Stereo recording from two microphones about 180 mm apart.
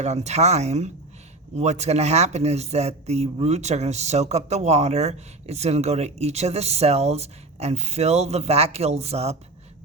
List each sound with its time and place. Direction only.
0.0 s speech: 35° right (ahead or behind)